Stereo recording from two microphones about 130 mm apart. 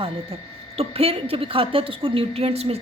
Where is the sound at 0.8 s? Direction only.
45° right (ahead or behind).